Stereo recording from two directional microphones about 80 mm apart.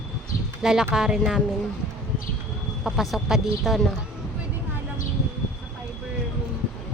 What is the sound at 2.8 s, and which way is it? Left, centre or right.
Speech, centre.